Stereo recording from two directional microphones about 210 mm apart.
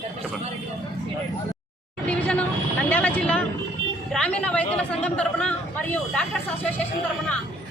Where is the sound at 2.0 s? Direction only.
5° left (ahead or behind).